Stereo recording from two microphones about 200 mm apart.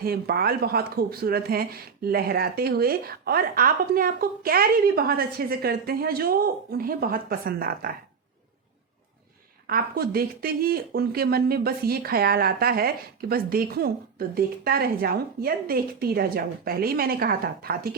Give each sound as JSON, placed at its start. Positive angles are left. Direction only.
{"t": 0.0, "sound": "speech", "side_deg": -50}
{"t": 9.6, "sound": "speech", "side_deg": -50}